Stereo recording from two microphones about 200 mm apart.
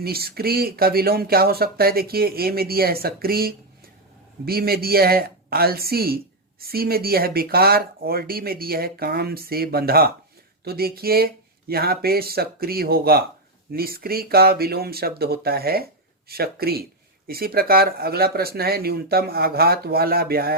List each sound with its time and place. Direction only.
0.0 s speech: 50° right (ahead or behind)